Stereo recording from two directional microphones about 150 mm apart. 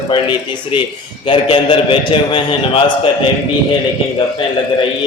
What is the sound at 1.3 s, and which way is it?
A man's voice, 35° left (ahead or behind).